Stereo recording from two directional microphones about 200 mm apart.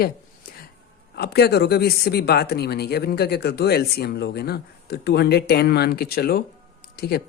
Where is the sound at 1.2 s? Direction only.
55° left (ahead or behind).